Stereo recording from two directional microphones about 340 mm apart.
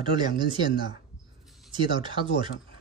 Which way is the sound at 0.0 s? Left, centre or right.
Centre.